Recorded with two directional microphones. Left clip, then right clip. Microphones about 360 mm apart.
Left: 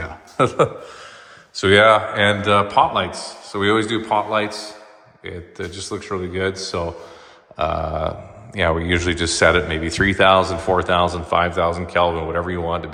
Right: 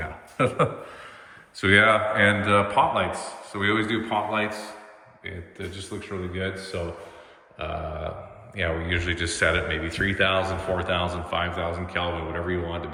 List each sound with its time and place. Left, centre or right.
0.3 s speech: centre